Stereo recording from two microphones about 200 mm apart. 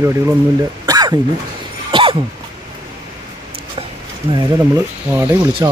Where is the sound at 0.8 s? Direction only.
20° right (ahead or behind).